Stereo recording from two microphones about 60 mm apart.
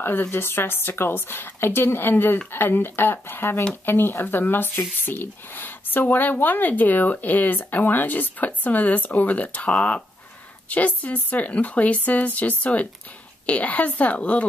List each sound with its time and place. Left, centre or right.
0.3 s a woman's voice: left